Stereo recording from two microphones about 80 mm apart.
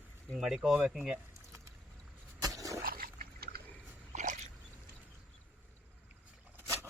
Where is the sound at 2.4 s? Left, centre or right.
Right.